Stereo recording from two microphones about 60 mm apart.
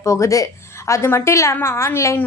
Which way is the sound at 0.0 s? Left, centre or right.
Left.